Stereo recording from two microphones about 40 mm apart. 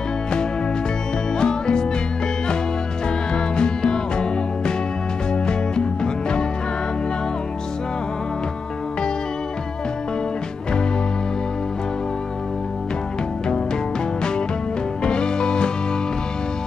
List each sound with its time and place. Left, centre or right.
1.4 s music: centre
3.3 s music: left
15.0 s music: left